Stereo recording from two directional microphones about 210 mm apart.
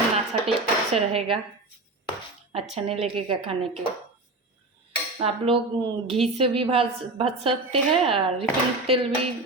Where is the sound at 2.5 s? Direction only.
30° right (ahead or behind).